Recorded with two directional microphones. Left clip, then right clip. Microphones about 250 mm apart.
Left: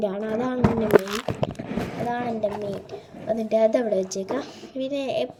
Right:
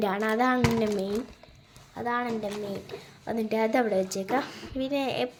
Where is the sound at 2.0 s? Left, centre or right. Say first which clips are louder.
Left 2 dB; centre.